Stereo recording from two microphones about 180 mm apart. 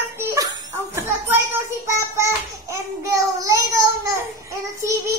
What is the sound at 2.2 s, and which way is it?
Child singing, 15° right (ahead or behind).